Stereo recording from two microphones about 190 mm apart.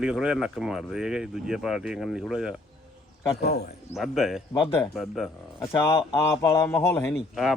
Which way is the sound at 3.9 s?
Centre (ahead or behind).